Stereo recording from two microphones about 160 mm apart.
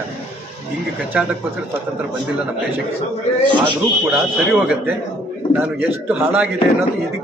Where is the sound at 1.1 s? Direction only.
5° right (ahead or behind).